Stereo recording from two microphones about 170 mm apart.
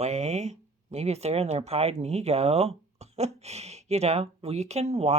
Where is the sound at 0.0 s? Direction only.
40° right (ahead or behind).